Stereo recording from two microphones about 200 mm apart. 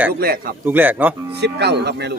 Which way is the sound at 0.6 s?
10° right (ahead or behind).